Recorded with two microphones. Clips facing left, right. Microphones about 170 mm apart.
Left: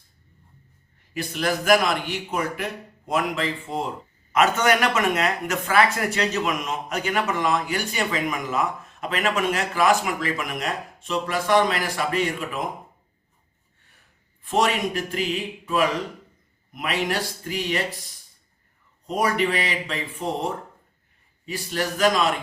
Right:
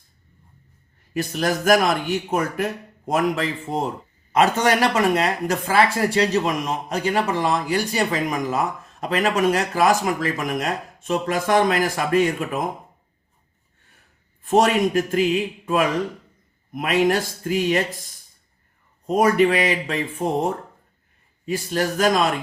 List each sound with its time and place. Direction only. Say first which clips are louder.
1.1 s speech: right 3 dB; 45° right (ahead or behind)
4.3 s speech: right 2 dB; 35° right (ahead or behind)
14.4 s speech: right 5 dB; 45° right (ahead or behind)
16.7 s speech: right 7 dB; 45° right (ahead or behind)